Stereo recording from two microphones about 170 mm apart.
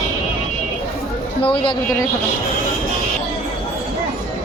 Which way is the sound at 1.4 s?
30° left (ahead or behind).